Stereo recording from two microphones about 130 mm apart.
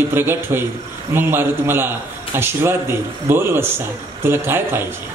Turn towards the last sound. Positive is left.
turn(degrees=-15)  # may be behind; listen again after turning